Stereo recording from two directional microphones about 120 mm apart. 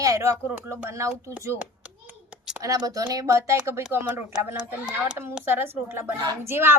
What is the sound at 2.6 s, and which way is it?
Speech, 30° right (ahead or behind).